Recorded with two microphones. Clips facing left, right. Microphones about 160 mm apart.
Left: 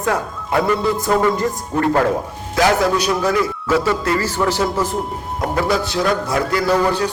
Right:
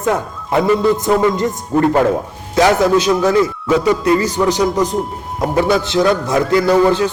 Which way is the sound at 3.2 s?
20° right (ahead or behind).